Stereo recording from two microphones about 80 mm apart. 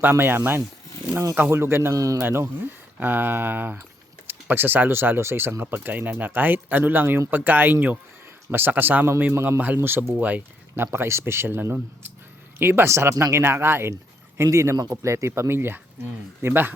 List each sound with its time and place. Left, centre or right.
0.0 s speech: right
2.0 s a man's voice: right
2.2 s speech: right
10.9 s speech: right